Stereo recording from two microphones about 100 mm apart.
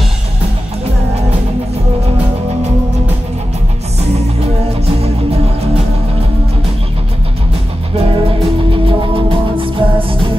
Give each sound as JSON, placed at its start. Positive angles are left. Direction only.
{"t": 7.9, "sound": "music", "side_deg": -75}